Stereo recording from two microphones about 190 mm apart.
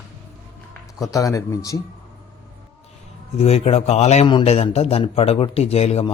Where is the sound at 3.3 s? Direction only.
30° left (ahead or behind).